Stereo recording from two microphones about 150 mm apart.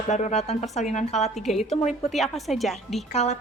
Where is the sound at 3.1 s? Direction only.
45° left (ahead or behind).